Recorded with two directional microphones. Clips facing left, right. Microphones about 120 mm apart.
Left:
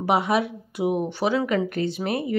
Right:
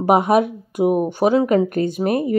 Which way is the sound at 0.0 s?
45° right (ahead or behind).